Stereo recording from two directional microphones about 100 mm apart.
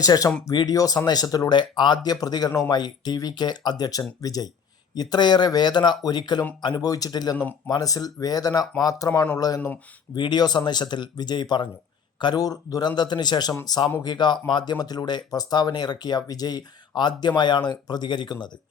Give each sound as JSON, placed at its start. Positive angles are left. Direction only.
{"t": 0.0, "sound": "speech", "side_deg": 40}
{"t": 10.2, "sound": "speech", "side_deg": 45}